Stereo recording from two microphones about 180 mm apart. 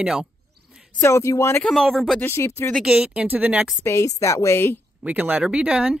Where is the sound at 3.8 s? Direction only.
15° left (ahead or behind).